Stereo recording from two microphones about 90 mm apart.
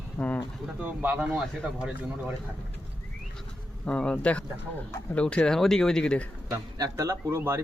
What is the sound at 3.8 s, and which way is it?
Speech, 10° left (ahead or behind).